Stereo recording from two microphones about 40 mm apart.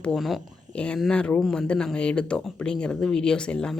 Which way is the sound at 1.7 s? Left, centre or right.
Centre.